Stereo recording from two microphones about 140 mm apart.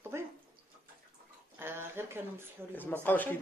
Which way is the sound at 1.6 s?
15° right (ahead or behind).